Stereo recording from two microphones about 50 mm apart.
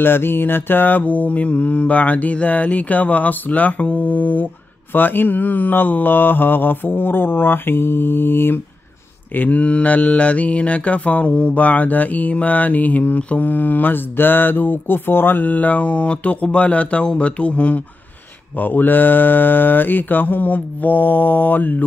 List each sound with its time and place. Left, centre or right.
0.0 s mantra: left
9.3 s mantra: left
15.4 s speech: left
18.6 s mantra: left